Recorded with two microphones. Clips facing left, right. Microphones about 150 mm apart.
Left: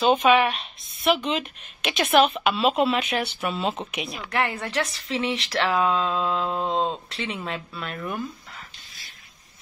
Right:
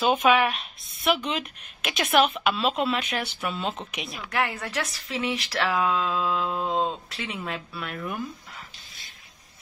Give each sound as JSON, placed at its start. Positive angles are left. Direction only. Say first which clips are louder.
{"t": 0.0, "sound": "speech", "louder": "left 2 dB", "side_deg": 0}
{"t": 6.4, "sound": "a sound", "louder": "left 2 dB", "side_deg": 25}
{"t": 7.1, "sound": "speech", "louder": "left 2 dB", "side_deg": -5}